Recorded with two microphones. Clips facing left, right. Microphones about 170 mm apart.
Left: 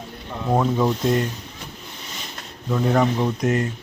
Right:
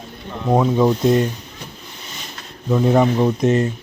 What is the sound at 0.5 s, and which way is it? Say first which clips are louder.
Speech: right 4 dB; 15° right (ahead or behind).